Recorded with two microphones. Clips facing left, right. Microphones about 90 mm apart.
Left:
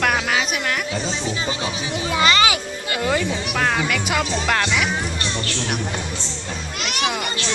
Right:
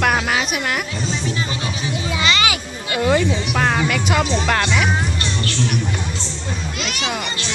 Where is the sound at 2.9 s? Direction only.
10° right (ahead or behind).